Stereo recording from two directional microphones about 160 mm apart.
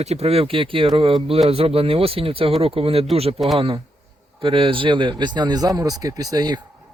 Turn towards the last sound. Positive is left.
turn(degrees=-25)  # may be behind; listen again after turning